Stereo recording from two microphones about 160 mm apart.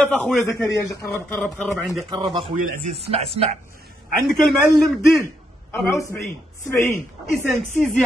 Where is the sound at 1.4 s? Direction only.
Centre (ahead or behind).